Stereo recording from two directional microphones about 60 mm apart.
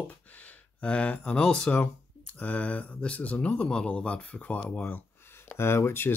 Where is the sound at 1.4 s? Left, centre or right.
Centre.